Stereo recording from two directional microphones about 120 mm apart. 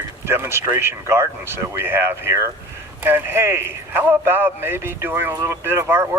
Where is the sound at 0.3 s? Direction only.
20° right (ahead or behind).